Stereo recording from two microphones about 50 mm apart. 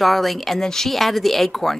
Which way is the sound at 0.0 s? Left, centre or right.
Centre.